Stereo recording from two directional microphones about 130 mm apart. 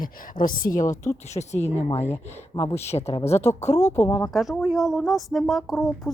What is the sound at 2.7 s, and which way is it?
Speech, 55° left (ahead or behind).